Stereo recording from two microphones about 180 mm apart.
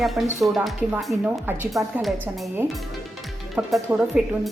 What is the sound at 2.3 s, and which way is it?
Speech, 5° right (ahead or behind).